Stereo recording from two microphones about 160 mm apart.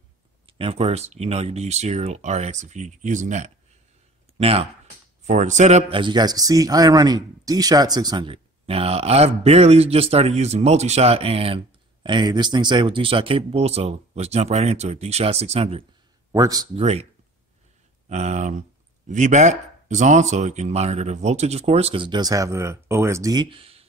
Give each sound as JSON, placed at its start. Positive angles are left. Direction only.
{"t": 0.5, "sound": "speech", "side_deg": -35}
{"t": 5.9, "sound": "speech", "side_deg": -30}
{"t": 16.3, "sound": "speech", "side_deg": -20}
{"t": 16.7, "sound": "speech", "side_deg": -40}